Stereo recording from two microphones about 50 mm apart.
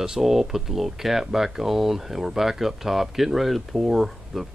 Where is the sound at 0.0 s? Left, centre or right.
Centre.